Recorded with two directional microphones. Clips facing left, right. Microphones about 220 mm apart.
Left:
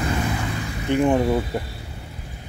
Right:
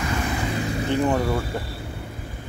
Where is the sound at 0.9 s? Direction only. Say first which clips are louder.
Left 4 dB; 20° left (ahead or behind).